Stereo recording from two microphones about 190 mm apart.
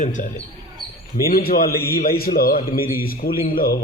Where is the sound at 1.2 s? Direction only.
50° left (ahead or behind).